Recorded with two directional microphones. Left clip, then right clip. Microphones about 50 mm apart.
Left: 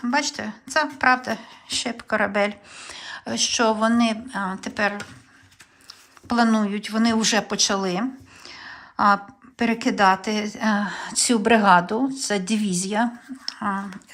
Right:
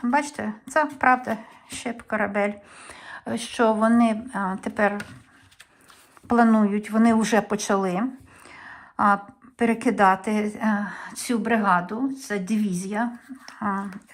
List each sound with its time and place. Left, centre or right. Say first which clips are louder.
0.0 s a woman's voice: even; centre
2.0 s speech: left 2 dB; centre
2.7 s speech: left 4 dB; centre
4.6 s speech: right 2 dB; right
6.2 s speech: right 1 dB; centre
7.9 s a sound: left 1 dB; centre
8.5 s a sound: left 1 dB; centre
9.7 s a woman's voice: left 1 dB; centre
10.8 s speech: left 4 dB; left
11.0 s speech: left 6 dB; left
11.9 s speech: left 5 dB; left
12.5 s speech: left 3 dB; left
13.5 s speech: left 1 dB; centre